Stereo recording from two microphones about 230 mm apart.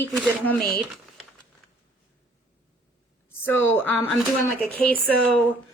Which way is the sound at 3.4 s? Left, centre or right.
Centre.